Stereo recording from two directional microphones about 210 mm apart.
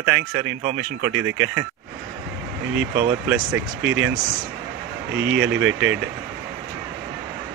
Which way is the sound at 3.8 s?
60° right (ahead or behind).